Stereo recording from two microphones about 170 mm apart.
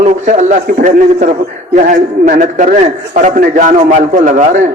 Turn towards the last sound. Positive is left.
turn(degrees=-50)  # may be behind; listen again after turning